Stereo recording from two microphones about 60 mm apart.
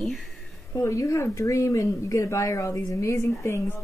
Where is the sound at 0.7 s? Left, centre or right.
Left.